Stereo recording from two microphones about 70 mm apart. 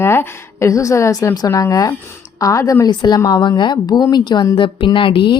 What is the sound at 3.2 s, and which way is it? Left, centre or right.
Speech, left.